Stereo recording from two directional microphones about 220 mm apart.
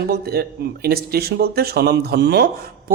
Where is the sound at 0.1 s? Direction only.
45° right (ahead or behind).